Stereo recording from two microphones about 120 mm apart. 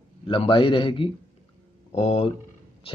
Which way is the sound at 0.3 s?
45° left (ahead or behind).